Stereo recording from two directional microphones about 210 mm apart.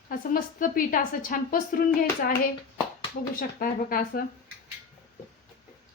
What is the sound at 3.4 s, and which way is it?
Speech, 45° left (ahead or behind).